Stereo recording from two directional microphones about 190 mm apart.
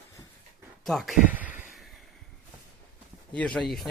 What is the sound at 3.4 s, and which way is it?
Speech, 5° left (ahead or behind).